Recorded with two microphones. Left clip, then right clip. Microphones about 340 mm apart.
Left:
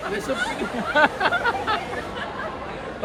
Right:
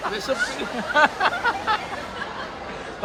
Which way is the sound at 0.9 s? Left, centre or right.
Centre.